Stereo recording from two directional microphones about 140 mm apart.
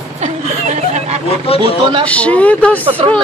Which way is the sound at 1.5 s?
45° left (ahead or behind).